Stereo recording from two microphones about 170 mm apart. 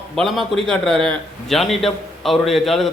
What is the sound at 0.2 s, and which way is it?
A man's voice, centre (ahead or behind).